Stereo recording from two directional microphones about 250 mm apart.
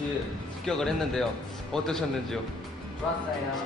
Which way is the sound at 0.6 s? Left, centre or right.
Centre.